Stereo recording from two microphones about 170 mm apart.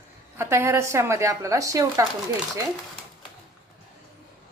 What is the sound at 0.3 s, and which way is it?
Speech, 15° right (ahead or behind).